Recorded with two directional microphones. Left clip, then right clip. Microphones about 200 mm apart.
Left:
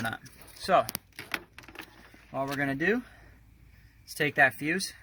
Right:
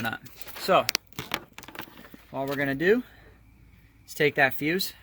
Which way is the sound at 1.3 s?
60° right (ahead or behind).